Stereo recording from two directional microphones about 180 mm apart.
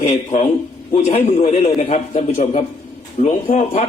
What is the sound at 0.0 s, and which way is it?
A man's voice, 35° left (ahead or behind).